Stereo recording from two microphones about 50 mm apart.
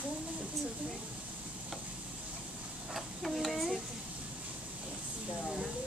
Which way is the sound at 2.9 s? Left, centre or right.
Centre.